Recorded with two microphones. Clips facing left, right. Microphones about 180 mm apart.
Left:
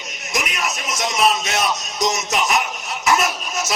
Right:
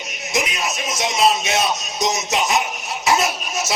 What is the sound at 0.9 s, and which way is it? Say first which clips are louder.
Music: right 1 dB; 25° right (ahead or behind).